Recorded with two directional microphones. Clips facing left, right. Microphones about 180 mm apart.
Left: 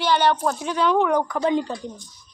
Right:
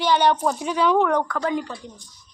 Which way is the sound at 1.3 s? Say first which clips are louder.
Left 3 dB; 25° left (ahead or behind).